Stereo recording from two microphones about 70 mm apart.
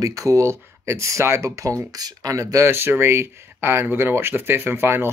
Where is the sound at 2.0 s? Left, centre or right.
Right.